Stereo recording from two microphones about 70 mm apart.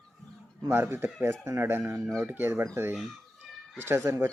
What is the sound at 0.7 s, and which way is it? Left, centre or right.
Speech, right.